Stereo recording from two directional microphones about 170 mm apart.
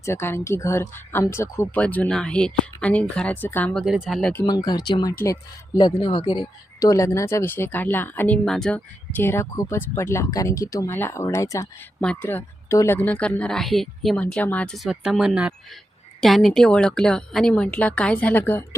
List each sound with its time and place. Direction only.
0.0 s speech: 15° left (ahead or behind)
3.8 s a woman's voice: 5° right (ahead or behind)
4.4 s a woman's voice: 20° left (ahead or behind)